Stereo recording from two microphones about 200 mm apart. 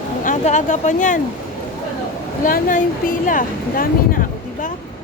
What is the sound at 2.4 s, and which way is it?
Speech, 40° left (ahead or behind).